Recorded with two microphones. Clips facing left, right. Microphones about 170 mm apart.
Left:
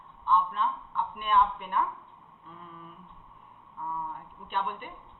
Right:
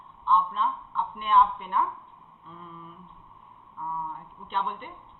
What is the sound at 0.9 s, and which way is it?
Speech, 55° left (ahead or behind).